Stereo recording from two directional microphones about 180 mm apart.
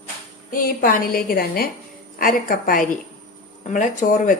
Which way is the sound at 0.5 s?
50° left (ahead or behind).